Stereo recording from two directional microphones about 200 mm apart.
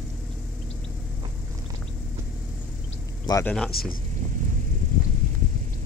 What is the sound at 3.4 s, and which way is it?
Speech, 5° left (ahead or behind).